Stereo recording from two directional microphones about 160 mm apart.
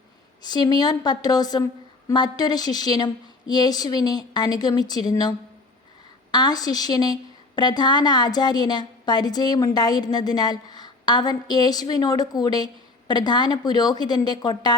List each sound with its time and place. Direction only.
0.4 s a woman's voice: 25° left (ahead or behind)
6.3 s a woman's voice: 25° left (ahead or behind)